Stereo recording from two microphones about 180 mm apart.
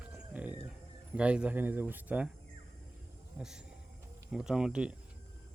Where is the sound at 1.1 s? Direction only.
5° right (ahead or behind).